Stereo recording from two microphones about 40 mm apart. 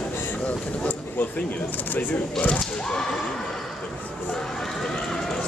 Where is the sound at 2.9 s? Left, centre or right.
Centre.